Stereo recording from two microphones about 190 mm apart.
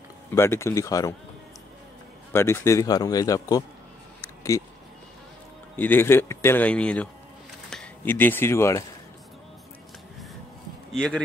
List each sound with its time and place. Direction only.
0.3 s speech: 15° left (ahead or behind)
2.3 s speech: 15° left (ahead or behind)
5.8 s speech: 10° left (ahead or behind)
10.9 s speech: 5° left (ahead or behind)